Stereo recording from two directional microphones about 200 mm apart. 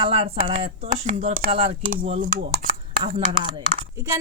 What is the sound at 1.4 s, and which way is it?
Speech, 25° right (ahead or behind).